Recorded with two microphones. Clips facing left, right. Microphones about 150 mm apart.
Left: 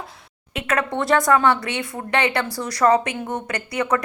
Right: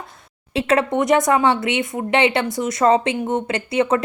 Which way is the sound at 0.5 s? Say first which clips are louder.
Right 5 dB; 30° right (ahead or behind).